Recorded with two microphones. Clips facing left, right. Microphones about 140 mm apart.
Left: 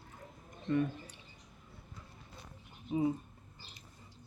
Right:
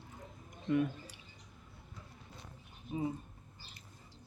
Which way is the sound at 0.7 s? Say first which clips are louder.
Even; 10° right (ahead or behind).